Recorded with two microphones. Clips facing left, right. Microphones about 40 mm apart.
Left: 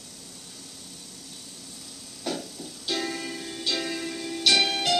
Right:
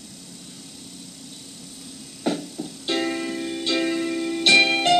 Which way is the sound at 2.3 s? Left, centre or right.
Right.